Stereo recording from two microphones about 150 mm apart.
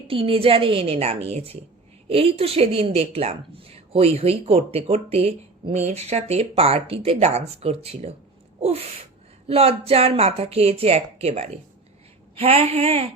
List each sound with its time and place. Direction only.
0.1 s a woman's voice: 40° right (ahead or behind)